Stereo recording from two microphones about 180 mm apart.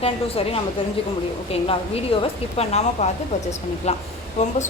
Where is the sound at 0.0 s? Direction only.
30° left (ahead or behind).